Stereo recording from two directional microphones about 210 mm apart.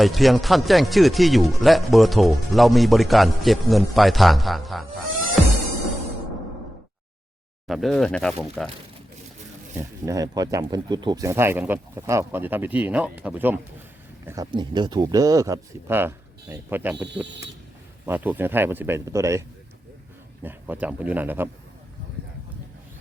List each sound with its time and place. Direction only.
0.0 s speech: centre (ahead or behind)
7.7 s speech: centre (ahead or behind)
9.7 s speech: 15° right (ahead or behind)